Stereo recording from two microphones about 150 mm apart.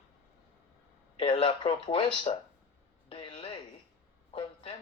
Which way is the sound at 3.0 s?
35° left (ahead or behind).